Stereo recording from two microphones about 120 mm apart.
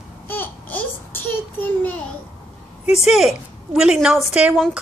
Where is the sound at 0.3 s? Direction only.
15° left (ahead or behind).